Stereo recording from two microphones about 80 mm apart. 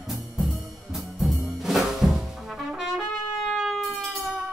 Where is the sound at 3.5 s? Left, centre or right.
Centre.